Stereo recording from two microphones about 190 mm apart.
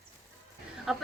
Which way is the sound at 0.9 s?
Centre (ahead or behind).